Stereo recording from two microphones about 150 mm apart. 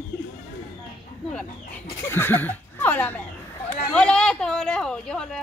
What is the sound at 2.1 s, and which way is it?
Speech, 15° left (ahead or behind).